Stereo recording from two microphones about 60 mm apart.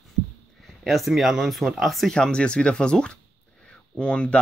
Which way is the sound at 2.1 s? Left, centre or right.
Centre.